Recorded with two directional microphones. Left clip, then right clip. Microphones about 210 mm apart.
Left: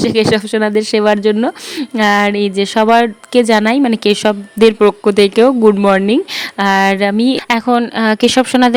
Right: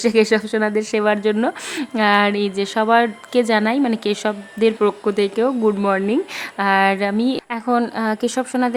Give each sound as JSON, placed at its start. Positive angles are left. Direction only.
{"t": 0.0, "sound": "speech", "side_deg": 40}